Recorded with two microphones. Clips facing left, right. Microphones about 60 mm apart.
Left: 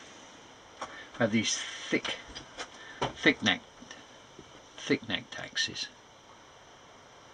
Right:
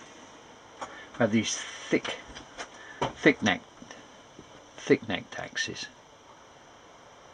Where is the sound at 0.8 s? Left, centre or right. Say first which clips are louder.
Right 3 dB; centre.